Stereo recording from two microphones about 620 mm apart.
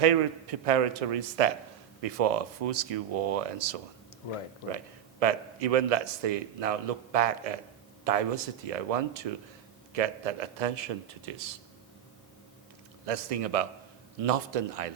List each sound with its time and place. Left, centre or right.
0.6 s speech: right
5.2 s a man's voice: right
13.1 s speech: right